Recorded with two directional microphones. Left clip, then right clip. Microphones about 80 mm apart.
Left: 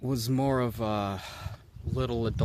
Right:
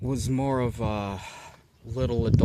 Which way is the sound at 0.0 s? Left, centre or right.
Centre.